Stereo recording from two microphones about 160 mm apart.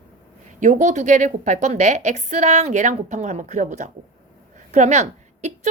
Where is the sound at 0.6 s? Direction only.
50° right (ahead or behind).